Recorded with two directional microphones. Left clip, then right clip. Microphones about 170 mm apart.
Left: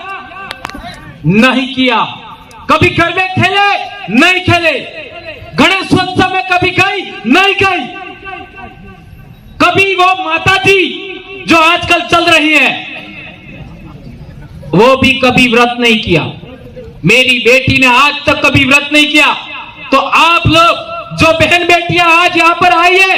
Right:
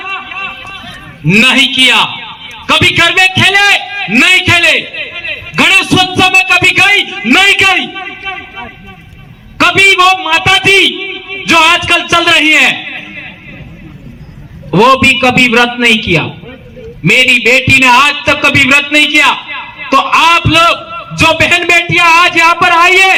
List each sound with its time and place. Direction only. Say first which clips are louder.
1.3 s a man's voice: right 4 dB; 10° right (ahead or behind)
5.9 s a man's voice: right 4 dB; 10° right (ahead or behind)
7.3 s a sound: right 2 dB; 10° right (ahead or behind)
9.6 s a man's voice: right 2 dB; 5° right (ahead or behind)
14.7 s a man's voice: right 1 dB; centre (ahead or behind)